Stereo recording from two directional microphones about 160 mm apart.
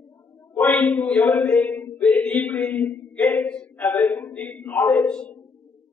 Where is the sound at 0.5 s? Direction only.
15° left (ahead or behind).